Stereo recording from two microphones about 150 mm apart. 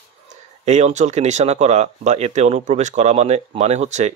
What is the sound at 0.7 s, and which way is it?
Speech, 50° right (ahead or behind).